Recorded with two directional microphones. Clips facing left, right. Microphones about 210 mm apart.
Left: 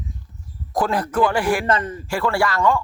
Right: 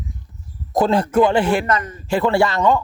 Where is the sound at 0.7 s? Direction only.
25° right (ahead or behind).